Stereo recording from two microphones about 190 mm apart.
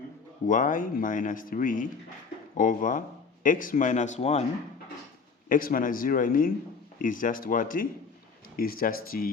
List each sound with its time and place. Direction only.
0.4 s speech: 45° left (ahead or behind)
5.5 s speech: 50° left (ahead or behind)